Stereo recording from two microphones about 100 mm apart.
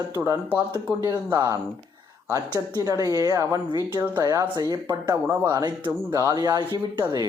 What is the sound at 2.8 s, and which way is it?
Speech, 35° right (ahead or behind).